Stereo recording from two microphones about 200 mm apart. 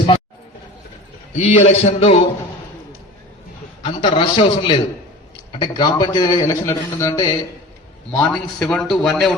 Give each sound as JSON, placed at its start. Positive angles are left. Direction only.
{"t": 1.4, "sound": "a man's voice", "side_deg": 35}
{"t": 3.8, "sound": "a man's voice", "side_deg": 30}
{"t": 8.1, "sound": "a man's voice", "side_deg": 5}